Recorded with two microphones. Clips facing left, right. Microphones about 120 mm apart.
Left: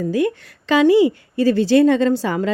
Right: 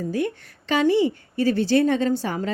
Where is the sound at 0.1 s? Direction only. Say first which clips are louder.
Left 6 dB; 90° left.